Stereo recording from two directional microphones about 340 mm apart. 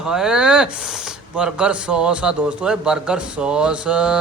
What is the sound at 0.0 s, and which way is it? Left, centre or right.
Speech, centre.